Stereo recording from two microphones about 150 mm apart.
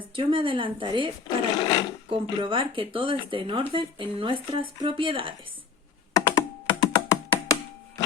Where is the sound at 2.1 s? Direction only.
35° right (ahead or behind).